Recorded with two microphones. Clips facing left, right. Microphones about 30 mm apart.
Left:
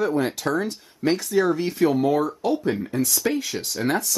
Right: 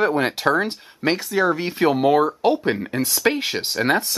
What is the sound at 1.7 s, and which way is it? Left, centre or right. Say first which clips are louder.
Speech: right 3 dB; right.